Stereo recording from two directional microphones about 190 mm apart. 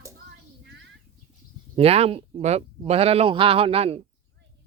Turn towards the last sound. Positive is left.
turn(degrees=-30)  # may be behind; listen again after turning